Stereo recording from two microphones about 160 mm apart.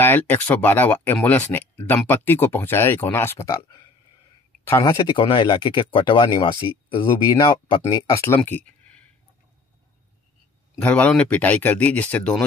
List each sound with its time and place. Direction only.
0.0 s speech: 10° left (ahead or behind)
4.6 s speech: 15° left (ahead or behind)
4.9 s speech: 30° left (ahead or behind)
8.1 s speech: 15° left (ahead or behind)
8.4 s a sound: 10° left (ahead or behind)
10.8 s speech: 10° left (ahead or behind)